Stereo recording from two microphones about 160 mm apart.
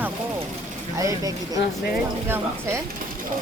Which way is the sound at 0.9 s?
20° right (ahead or behind).